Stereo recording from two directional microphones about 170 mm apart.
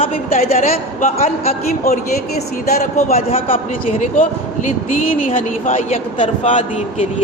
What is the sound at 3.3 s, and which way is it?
Speech, 35° left (ahead or behind).